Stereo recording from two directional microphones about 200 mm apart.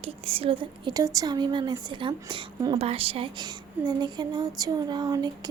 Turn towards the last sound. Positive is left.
turn(degrees=-20)  # may be behind; listen again after turning